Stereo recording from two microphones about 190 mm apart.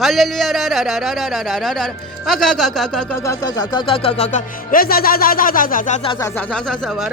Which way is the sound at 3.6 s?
25° left (ahead or behind).